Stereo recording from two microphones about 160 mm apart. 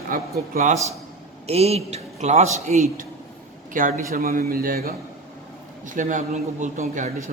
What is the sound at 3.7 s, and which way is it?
Speech, 55° right (ahead or behind).